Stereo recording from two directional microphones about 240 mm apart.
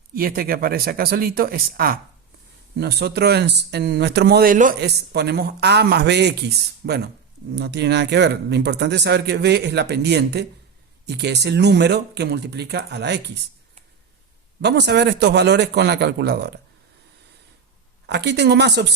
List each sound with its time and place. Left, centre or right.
0.1 s speech: right
14.6 s speech: right
18.0 s speech: right